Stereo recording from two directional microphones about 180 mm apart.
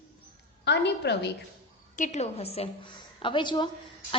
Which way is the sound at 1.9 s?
40° left (ahead or behind).